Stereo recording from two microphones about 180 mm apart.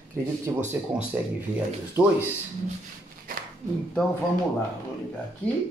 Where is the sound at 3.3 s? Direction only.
50° right (ahead or behind).